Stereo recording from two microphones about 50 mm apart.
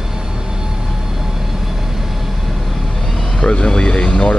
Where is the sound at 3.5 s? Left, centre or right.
Centre.